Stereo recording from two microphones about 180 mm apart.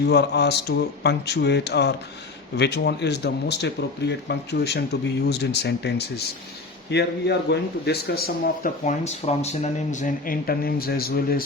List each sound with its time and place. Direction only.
0.1 s speech: 65° left (ahead or behind)
8.8 s speech: 40° left (ahead or behind); by 11.4 s 55° left (ahead or behind)